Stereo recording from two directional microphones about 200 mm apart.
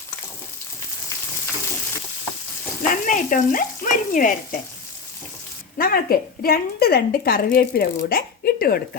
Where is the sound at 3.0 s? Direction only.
40° left (ahead or behind).